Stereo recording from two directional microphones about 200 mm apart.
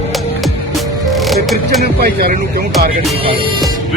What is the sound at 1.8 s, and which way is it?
Speech, 50° right (ahead or behind).